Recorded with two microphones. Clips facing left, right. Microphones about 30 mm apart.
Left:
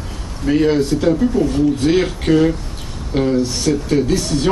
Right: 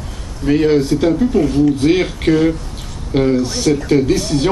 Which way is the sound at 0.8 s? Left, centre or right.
Centre.